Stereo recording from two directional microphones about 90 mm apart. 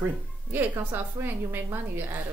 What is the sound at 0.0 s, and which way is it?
A woman's voice, 25° right (ahead or behind).